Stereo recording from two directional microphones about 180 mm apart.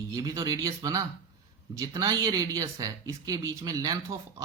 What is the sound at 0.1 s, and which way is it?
Speech, 20° right (ahead or behind).